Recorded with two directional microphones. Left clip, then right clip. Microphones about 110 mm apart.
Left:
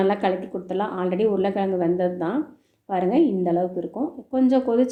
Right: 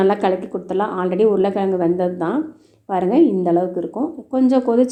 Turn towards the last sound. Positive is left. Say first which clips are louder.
# right 4 dB
turn(degrees=-35)  # may be behind; listen again after turning